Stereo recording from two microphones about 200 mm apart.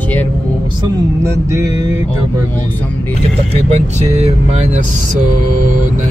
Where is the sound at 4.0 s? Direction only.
35° right (ahead or behind).